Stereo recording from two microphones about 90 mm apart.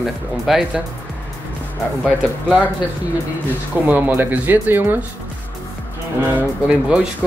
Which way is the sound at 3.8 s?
20° right (ahead or behind).